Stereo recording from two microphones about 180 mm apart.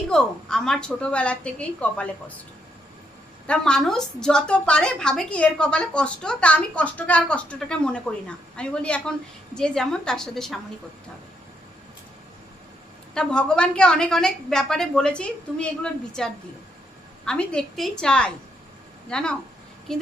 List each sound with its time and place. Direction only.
0.1 s a woman's voice: 5° left (ahead or behind)
3.4 s a woman's voice: 5° left (ahead or behind)
13.1 s a woman's voice: 5° left (ahead or behind)